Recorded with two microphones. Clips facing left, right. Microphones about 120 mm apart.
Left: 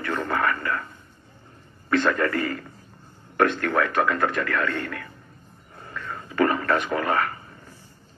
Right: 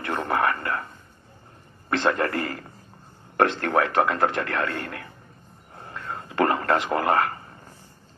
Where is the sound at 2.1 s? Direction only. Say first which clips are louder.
Left 1 dB; 30° right (ahead or behind).